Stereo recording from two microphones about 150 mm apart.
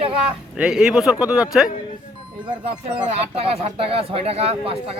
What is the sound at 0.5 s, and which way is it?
Speech, 5° right (ahead or behind).